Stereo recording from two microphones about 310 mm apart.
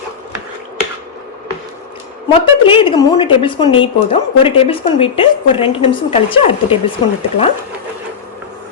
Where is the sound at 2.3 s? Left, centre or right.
Centre.